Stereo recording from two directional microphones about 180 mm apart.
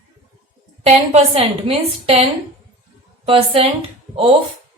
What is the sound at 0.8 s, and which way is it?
A woman's voice, 35° right (ahead or behind).